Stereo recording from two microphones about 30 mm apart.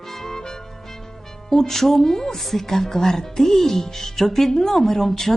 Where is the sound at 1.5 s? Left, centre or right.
Centre.